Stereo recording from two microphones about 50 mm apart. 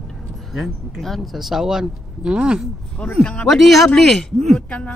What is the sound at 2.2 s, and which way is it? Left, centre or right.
Speech, centre.